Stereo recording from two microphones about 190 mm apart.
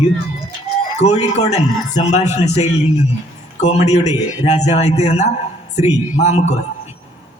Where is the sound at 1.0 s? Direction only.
35° left (ahead or behind).